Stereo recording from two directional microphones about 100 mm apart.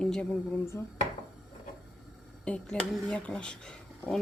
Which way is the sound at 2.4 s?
10° left (ahead or behind).